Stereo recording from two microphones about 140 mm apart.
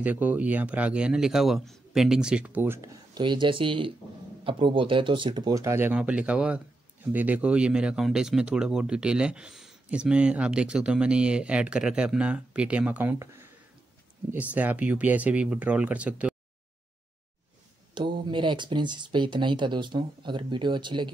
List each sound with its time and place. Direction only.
0.0 s speech: 10° right (ahead or behind)
3.2 s speech: 35° right (ahead or behind); by 13.5 s 20° right (ahead or behind)
14.5 s speech: 10° right (ahead or behind)
17.9 s speech: 35° right (ahead or behind)